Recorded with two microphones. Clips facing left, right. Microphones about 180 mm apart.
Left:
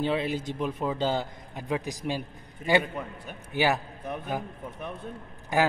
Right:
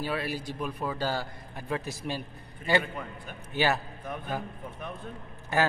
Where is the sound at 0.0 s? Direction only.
20° left (ahead or behind).